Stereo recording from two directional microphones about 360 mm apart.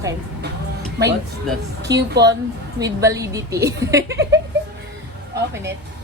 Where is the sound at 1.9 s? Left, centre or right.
Right.